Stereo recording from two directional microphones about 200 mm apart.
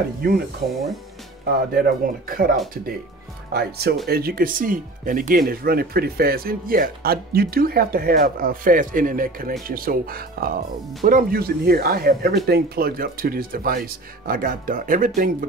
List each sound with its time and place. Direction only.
0.2 s speech: 45° right (ahead or behind)
0.7 s speech: centre (ahead or behind)
1.7 s speech: 50° right (ahead or behind)
3.5 s speech: 50° right (ahead or behind)